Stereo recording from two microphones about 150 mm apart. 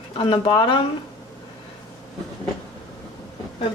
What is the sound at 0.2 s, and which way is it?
Speech, 35° left (ahead or behind).